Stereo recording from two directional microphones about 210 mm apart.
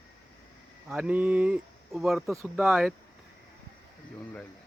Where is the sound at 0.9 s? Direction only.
5° right (ahead or behind).